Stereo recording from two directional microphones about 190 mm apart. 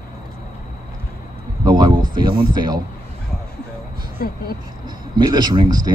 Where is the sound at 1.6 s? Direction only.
20° right (ahead or behind).